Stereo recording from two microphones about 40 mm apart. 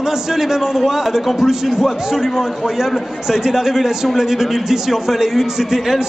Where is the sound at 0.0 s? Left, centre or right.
Centre.